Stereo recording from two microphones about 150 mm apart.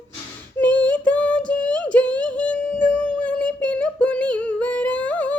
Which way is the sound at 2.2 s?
10° left (ahead or behind).